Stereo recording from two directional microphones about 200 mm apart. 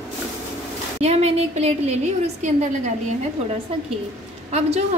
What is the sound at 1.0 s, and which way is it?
A woman's voice, 30° right (ahead or behind).